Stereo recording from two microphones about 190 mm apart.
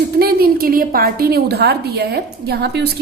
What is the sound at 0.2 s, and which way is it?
A woman's voice, 55° right (ahead or behind).